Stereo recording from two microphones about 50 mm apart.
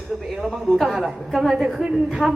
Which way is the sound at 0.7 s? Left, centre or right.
Centre.